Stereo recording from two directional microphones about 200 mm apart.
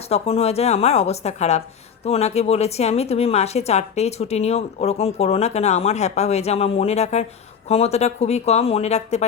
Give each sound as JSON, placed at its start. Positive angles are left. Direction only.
{"t": 0.1, "sound": "speech", "side_deg": 30}